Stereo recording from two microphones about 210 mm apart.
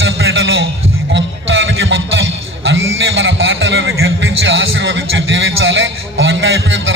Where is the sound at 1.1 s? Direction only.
60° right (ahead or behind).